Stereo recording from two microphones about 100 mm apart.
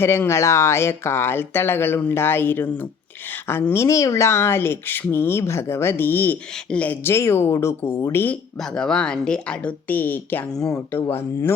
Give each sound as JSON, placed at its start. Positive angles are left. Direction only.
{"t": 0.0, "sound": "a woman's voice", "side_deg": 25}
{"t": 7.0, "sound": "speech", "side_deg": 25}
{"t": 8.7, "sound": "a woman's voice", "side_deg": 5}